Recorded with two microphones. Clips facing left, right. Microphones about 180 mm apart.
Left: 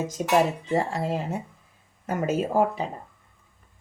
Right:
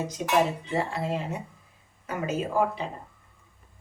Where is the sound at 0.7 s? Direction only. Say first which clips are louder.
Left 3 dB; 40° left (ahead or behind).